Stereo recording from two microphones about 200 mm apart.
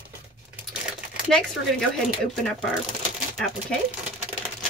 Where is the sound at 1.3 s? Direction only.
5° left (ahead or behind).